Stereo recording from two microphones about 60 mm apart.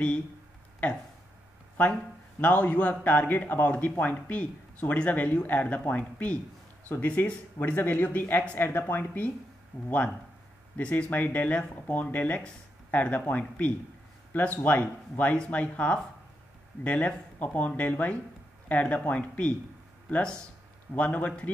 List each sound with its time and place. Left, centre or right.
2.4 s speech: left